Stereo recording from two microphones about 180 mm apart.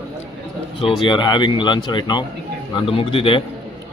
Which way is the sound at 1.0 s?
25° left (ahead or behind).